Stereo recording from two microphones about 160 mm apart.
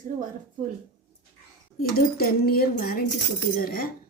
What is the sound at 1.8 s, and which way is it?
Speech, 70° left (ahead or behind).